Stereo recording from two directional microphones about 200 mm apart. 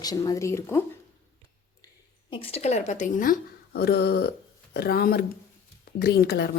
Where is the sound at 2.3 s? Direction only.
30° left (ahead or behind).